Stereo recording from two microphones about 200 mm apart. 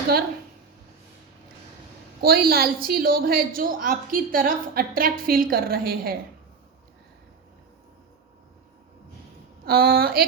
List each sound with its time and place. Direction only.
2.2 s a woman's voice: 50° right (ahead or behind)
9.6 s a woman's voice: 50° right (ahead or behind)